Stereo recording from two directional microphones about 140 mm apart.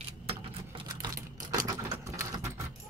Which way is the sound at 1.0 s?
25° right (ahead or behind).